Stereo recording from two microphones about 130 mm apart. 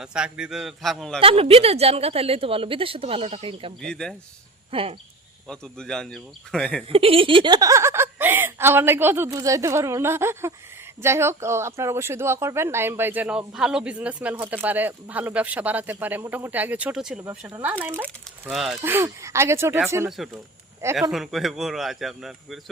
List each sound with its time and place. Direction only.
0.0 s speech: 5° right (ahead or behind)
1.2 s a woman's voice: 45° right (ahead or behind)
3.8 s speech: 5° left (ahead or behind)
4.7 s a woman's voice: 45° right (ahead or behind)
5.5 s speech: 5° left (ahead or behind)
6.8 s speech: 45° right (ahead or behind); by 17.2 s 5° right (ahead or behind)
17.6 s speech: 15° right (ahead or behind)
18.4 s speech: centre (ahead or behind)
18.8 s speech: 15° right (ahead or behind)
20.1 s speech: centre (ahead or behind)